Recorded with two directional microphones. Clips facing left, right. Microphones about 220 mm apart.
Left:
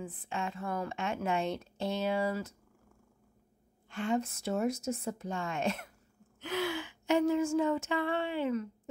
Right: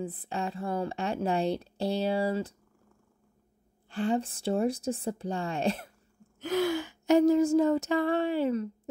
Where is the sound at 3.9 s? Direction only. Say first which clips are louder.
Right 3 dB; 35° right (ahead or behind).